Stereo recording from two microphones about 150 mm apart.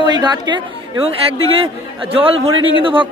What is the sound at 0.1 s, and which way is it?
Speech, 30° right (ahead or behind).